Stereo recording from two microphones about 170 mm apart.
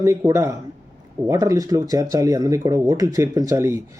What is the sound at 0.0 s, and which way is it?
Speech, 15° right (ahead or behind).